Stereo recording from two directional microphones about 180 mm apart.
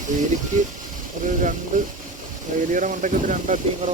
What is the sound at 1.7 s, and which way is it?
Speech, 45° right (ahead or behind).